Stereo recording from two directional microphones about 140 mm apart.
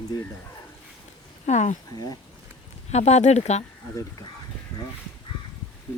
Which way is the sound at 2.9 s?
55° left (ahead or behind).